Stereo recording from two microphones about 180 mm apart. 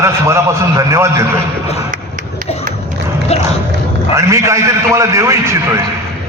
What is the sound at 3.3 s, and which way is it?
Music, 35° left (ahead or behind).